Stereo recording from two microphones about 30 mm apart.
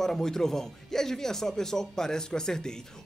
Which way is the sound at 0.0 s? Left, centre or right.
Centre.